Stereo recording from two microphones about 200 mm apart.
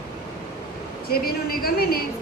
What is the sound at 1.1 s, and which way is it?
Speech, 50° left (ahead or behind).